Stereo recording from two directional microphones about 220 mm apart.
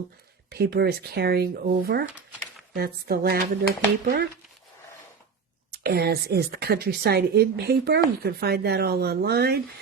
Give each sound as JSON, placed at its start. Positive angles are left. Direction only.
{"t": 0.5, "sound": "speech", "side_deg": -45}
{"t": 5.7, "sound": "speech", "side_deg": -45}